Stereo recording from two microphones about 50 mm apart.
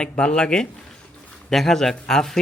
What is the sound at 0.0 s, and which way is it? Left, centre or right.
A man's voice, centre.